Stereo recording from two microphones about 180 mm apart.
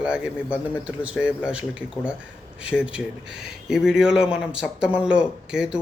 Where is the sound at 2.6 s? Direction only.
5° right (ahead or behind).